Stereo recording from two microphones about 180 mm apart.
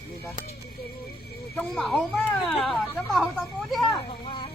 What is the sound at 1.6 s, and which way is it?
Speech, 5° left (ahead or behind).